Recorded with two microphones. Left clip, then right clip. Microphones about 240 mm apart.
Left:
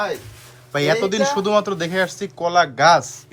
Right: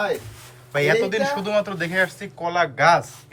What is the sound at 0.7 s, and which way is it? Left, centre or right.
Speech, centre.